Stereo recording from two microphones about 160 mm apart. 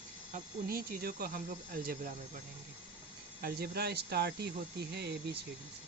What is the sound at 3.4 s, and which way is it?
Speech, 75° right (ahead or behind).